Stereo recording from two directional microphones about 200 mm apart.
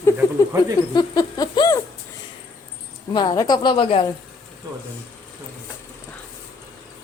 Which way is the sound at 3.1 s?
20° left (ahead or behind).